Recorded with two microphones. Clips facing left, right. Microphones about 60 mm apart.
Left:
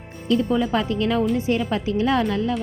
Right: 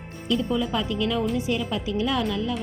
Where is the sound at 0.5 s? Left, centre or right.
Left.